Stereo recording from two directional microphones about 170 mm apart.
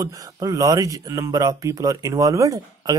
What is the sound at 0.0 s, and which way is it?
Speech, 20° right (ahead or behind).